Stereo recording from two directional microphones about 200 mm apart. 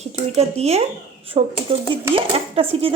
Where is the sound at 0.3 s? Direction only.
30° right (ahead or behind).